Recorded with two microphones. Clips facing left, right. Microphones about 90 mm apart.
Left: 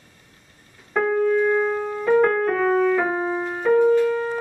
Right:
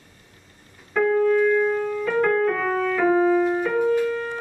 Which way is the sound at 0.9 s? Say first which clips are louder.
Right 1 dB; 20° left (ahead or behind).